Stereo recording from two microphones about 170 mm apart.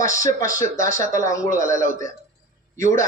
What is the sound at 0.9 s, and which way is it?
Speech, 50° right (ahead or behind).